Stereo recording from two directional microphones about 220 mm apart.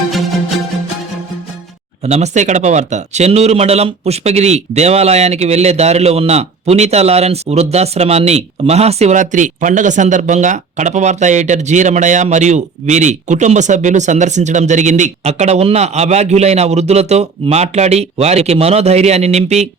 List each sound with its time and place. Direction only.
2.0 s a man's voice: 30° right (ahead or behind)